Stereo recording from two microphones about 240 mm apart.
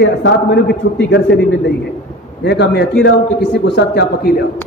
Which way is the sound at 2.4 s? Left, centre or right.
Left.